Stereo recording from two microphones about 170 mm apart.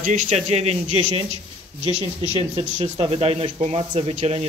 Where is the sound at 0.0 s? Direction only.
45° right (ahead or behind).